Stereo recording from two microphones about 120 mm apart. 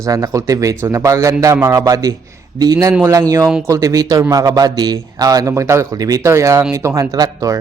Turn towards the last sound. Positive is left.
turn(degrees=-30)  # may be behind; listen again after turning